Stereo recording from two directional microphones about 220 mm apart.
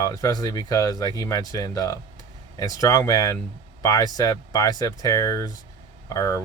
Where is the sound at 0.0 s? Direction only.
15° left (ahead or behind).